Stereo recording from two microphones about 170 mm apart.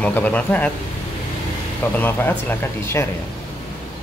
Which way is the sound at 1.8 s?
10° left (ahead or behind).